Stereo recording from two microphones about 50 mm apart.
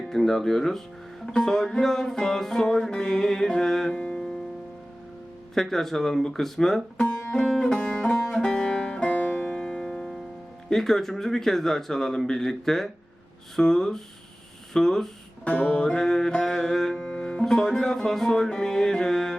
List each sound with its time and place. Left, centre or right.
0.1 s music: centre
3.9 s music: centre
5.5 s music: centre
14.7 s speech: centre
15.4 s music: left; by 19.4 s centre